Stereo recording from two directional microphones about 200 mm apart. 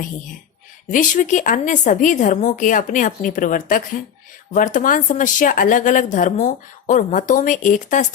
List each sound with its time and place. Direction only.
0.9 s speech: 40° left (ahead or behind)